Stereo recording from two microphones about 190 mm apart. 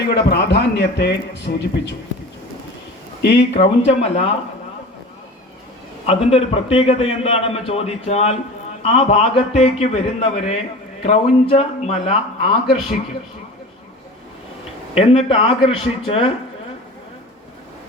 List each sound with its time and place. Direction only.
0.0 s a man's voice: 60° left (ahead or behind)
3.2 s speech: 65° left (ahead or behind)
3.5 s a man's voice: 30° left (ahead or behind)
6.1 s a man's voice: 30° left (ahead or behind)
14.9 s speech: 30° left (ahead or behind)